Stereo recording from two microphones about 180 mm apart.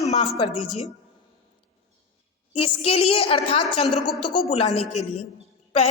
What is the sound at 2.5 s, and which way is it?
A woman's voice, 30° left (ahead or behind).